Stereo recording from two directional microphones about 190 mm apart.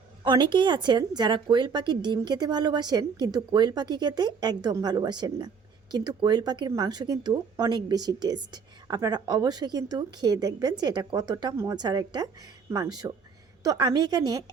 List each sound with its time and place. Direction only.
0.3 s speech: 25° right (ahead or behind)